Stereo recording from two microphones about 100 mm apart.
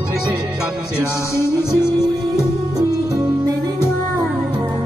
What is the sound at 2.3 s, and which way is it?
Music, 35° right (ahead or behind).